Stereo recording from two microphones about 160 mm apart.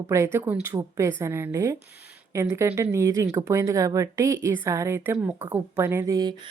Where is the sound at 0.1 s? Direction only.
15° right (ahead or behind).